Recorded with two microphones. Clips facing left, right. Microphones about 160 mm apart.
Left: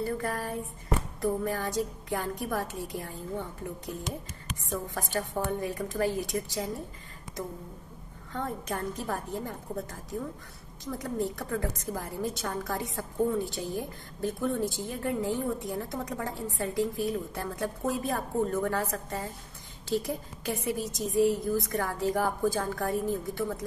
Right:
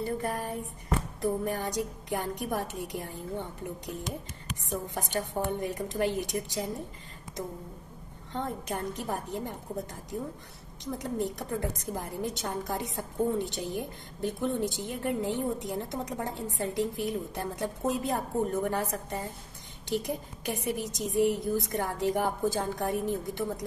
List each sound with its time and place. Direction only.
0.2 s a woman's voice: 20° right (ahead or behind)
8.3 s a woman's voice: 25° right (ahead or behind)
10.9 s a woman's voice: 20° right (ahead or behind)